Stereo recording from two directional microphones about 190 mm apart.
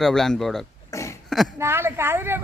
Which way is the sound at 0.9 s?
15° left (ahead or behind).